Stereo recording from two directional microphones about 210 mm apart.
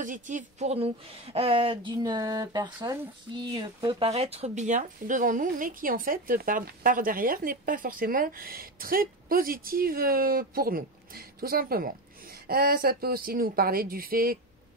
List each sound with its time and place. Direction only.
0.0 s speech: 35° right (ahead or behind)